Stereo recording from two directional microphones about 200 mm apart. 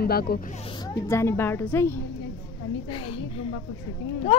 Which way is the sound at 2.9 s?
30° left (ahead or behind).